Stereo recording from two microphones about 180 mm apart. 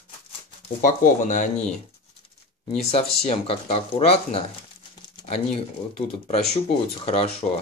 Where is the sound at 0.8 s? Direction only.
45° left (ahead or behind).